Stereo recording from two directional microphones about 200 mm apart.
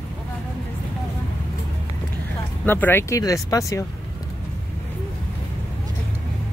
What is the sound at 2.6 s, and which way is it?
Speech, 10° left (ahead or behind).